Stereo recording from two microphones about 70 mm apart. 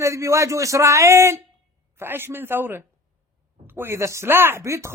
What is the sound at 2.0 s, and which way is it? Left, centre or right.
A man's voice, right.